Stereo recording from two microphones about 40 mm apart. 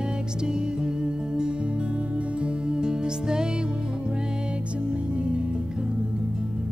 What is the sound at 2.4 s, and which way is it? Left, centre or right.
Music, right.